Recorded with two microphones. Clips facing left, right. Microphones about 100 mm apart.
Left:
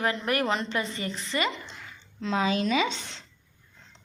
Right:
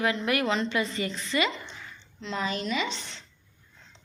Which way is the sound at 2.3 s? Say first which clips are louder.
Left 5 dB; 90° left.